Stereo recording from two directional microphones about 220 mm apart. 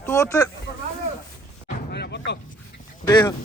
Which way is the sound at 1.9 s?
50° left (ahead or behind).